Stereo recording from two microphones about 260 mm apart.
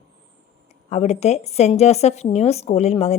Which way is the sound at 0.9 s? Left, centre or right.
Left.